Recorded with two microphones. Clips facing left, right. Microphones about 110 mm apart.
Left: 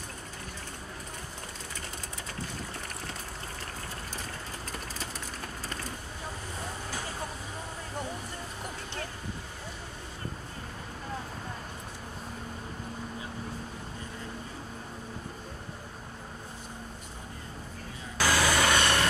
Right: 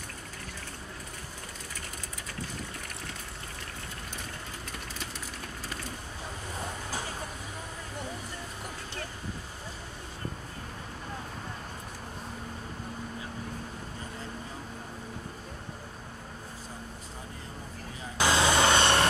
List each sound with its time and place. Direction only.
18.1 s vehicle: 20° right (ahead or behind)